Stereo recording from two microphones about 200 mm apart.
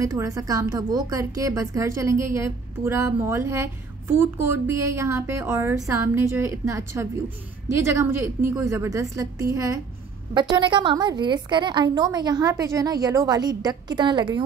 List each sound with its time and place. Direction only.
0.0 s a woman's voice: 15° right (ahead or behind)